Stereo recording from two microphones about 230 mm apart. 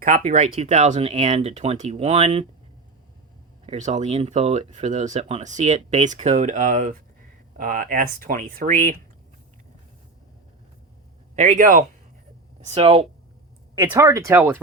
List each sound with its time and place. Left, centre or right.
0.0 s speech: right
3.7 s speech: right
11.3 s speech: right
13.9 s speech: centre